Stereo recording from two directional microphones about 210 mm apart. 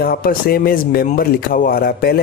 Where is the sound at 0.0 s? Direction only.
45° left (ahead or behind).